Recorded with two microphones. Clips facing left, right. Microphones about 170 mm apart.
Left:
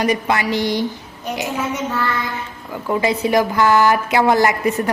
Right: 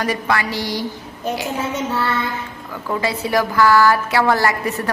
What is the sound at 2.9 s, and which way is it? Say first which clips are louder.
A woman's voice: left 3 dB; 20° left (ahead or behind).